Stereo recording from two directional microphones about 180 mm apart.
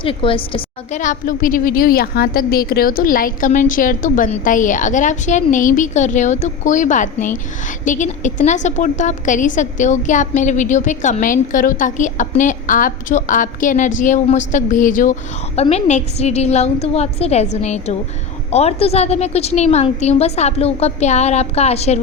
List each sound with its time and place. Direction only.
0.0 s a woman's voice: 30° left (ahead or behind)
0.9 s a woman's voice: 45° left (ahead or behind)
15.5 s a woman's voice: 35° left (ahead or behind)